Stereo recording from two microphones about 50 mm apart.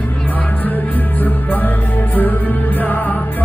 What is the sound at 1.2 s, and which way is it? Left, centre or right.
Music, left.